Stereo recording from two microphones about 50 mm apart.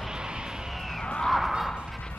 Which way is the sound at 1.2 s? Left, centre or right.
Centre.